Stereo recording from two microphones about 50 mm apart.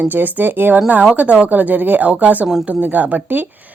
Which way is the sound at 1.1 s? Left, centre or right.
Right.